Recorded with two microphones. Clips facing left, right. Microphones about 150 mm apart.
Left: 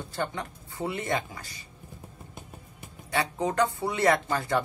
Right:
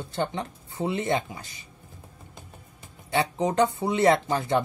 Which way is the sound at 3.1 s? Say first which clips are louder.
Right 3 dB; 20° right (ahead or behind).